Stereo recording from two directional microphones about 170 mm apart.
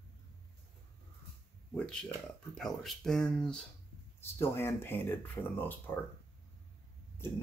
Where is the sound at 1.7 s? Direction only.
5° left (ahead or behind).